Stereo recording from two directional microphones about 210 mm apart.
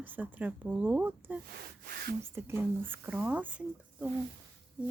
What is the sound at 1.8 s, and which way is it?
Speech, 50° right (ahead or behind).